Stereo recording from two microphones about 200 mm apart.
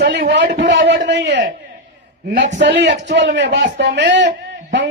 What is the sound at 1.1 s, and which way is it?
Speech, 60° right (ahead or behind).